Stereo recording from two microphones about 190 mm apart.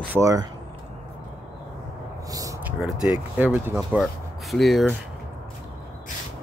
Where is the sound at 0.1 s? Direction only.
15° right (ahead or behind).